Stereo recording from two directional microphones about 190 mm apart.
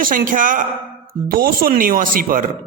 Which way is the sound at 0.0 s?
45° right (ahead or behind).